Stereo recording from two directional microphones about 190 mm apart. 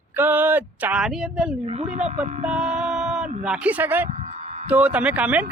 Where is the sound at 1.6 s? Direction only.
40° right (ahead or behind).